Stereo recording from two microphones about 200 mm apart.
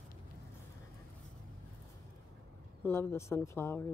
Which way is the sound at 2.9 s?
10° left (ahead or behind).